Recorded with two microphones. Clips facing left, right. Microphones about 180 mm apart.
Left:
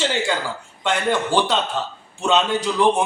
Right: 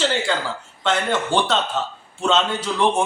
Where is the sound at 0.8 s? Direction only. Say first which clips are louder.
Left 1 dB; 10° left (ahead or behind).